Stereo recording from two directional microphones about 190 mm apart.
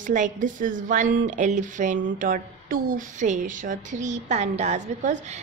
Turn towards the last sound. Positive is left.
turn(degrees=-35)  # may be behind; listen again after turning